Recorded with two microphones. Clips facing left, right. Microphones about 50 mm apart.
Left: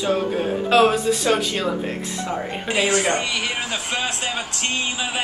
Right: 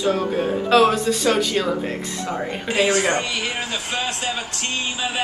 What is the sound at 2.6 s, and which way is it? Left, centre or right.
A man's voice, left.